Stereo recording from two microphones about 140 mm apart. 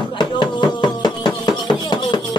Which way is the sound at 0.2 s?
30° left (ahead or behind).